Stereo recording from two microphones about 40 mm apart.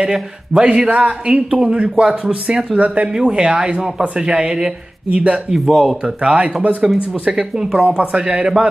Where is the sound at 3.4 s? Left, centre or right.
Right.